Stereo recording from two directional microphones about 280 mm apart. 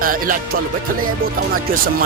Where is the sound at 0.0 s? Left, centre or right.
Right.